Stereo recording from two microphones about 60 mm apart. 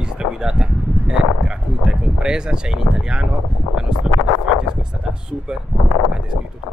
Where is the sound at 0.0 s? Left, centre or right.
Centre.